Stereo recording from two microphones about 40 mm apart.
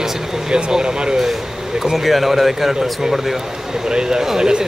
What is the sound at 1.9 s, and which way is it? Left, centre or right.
A man's voice, centre.